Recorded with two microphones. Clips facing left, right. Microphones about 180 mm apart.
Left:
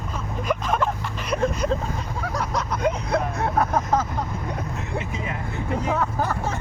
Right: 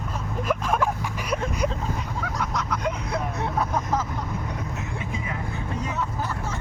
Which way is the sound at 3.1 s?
60° left (ahead or behind).